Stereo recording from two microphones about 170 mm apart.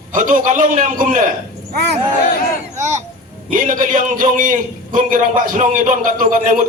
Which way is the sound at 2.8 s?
45° right (ahead or behind).